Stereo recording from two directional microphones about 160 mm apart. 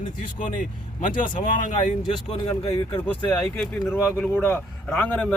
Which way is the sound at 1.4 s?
55° left (ahead or behind).